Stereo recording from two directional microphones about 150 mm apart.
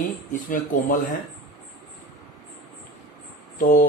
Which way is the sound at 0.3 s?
65° left (ahead or behind).